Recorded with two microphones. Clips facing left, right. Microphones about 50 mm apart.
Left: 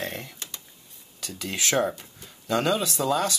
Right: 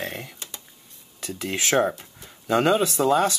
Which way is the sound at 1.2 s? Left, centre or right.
Right.